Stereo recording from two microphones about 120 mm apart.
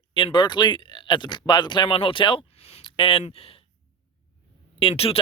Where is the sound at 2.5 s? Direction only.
60° left (ahead or behind).